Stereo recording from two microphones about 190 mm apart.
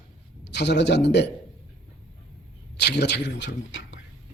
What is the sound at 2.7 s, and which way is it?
A man's voice, 60° left (ahead or behind).